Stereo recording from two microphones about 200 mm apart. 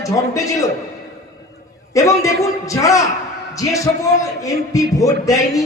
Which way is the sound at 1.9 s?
15° left (ahead or behind).